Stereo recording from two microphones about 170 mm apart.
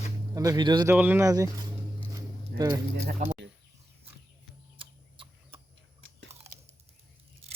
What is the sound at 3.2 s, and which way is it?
Speech, 45° right (ahead or behind).